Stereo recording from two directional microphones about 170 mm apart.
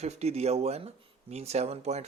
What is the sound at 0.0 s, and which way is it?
Speech, 40° right (ahead or behind).